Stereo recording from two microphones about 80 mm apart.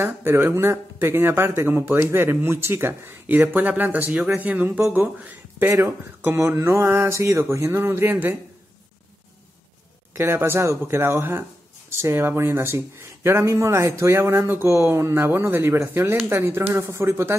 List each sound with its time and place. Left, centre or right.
0.0 s speech: right
10.1 s speech: right